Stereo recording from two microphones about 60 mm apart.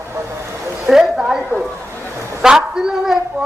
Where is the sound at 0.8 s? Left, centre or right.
Centre.